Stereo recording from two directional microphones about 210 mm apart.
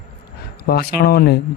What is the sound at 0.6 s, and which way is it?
Speech, 50° left (ahead or behind).